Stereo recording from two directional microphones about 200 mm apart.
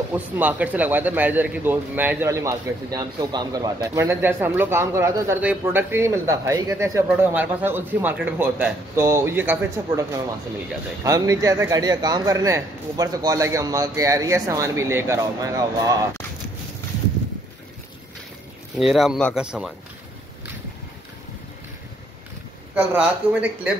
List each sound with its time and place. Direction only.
0.1 s a man's voice: 10° right (ahead or behind)
18.8 s speech: centre (ahead or behind)
22.8 s a man's voice: 5° right (ahead or behind)